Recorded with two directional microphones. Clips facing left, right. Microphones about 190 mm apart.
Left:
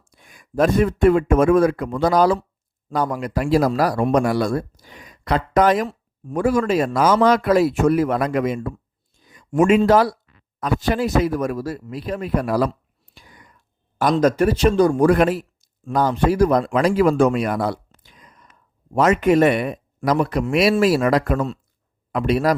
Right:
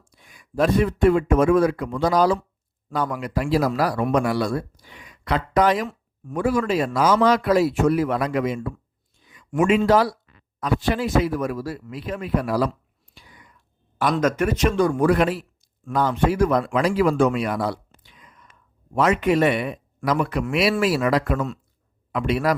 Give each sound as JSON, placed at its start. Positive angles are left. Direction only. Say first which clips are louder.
{"t": 0.1, "sound": "a man's voice", "louder": "left 4 dB", "side_deg": 50}
{"t": 2.9, "sound": "a man's voice", "louder": "left 3 dB", "side_deg": 40}
{"t": 13.1, "sound": "whispering", "louder": "left 2 dB", "side_deg": 45}
{"t": 14.0, "sound": "a man's voice", "louder": "left 4 dB", "side_deg": 35}